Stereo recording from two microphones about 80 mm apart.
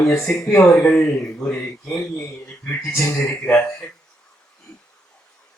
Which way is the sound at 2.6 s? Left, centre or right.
Left.